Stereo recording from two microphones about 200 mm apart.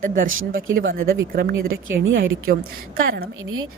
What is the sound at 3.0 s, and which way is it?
Speech, 50° right (ahead or behind).